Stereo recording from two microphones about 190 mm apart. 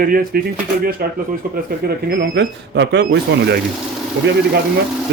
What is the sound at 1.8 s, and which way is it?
A man's voice, 65° right (ahead or behind).